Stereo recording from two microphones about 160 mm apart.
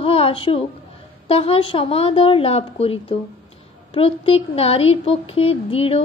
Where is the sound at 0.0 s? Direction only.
35° left (ahead or behind).